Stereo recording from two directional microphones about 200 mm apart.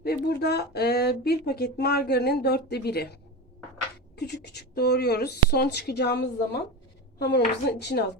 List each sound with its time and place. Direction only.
0.0 s speech: 55° left (ahead or behind)